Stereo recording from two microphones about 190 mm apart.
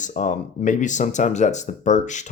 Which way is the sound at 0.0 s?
40° left (ahead or behind).